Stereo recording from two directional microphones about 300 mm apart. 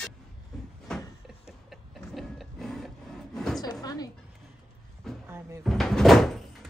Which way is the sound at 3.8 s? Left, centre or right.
Centre.